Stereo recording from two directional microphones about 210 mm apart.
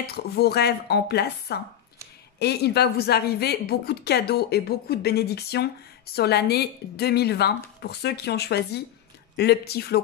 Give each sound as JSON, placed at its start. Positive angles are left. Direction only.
{"t": 0.0, "sound": "a woman's voice", "side_deg": 50}